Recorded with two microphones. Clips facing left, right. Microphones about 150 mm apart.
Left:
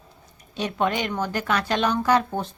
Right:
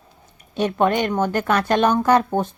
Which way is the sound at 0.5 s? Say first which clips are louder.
Right 6 dB; 50° right (ahead or behind).